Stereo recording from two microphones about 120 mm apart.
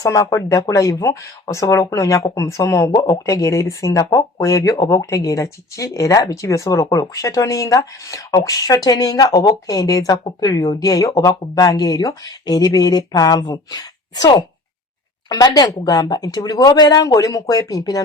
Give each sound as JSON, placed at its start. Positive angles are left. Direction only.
{"t": 0.0, "sound": "speech", "side_deg": 25}